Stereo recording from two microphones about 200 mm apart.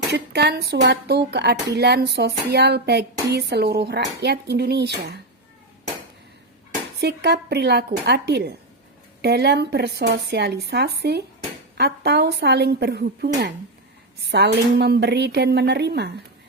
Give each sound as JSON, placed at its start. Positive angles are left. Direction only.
{"t": 0.1, "sound": "speech", "side_deg": -55}
{"t": 7.0, "sound": "speech", "side_deg": -55}